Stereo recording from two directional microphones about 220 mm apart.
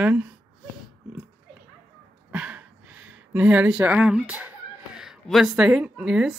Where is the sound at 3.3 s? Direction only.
5° right (ahead or behind).